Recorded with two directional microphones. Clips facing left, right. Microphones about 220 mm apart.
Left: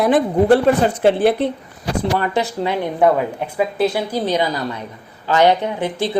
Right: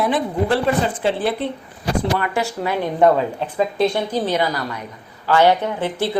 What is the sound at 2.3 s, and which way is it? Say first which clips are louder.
Speech: left 2 dB; 20° left (ahead or behind).